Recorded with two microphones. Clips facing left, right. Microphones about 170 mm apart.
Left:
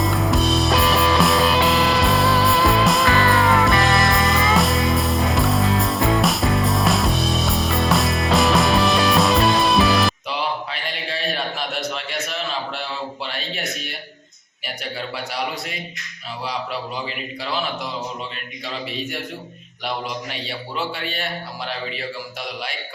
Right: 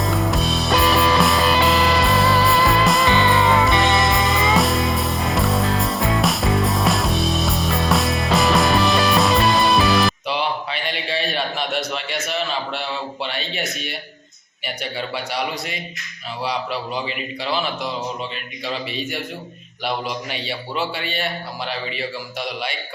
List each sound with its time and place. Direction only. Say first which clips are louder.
0.0 s music: left 1 dB; centre (ahead or behind)
13.2 s a sound: right 2 dB; centre (ahead or behind)
14.6 s a man's voice: right 2 dB; centre (ahead or behind)
17.1 s a man's voice: right 3 dB; centre (ahead or behind)
18.6 s a man's voice: right 2 dB; centre (ahead or behind)
20.3 s a man's voice: right 2 dB; centre (ahead or behind)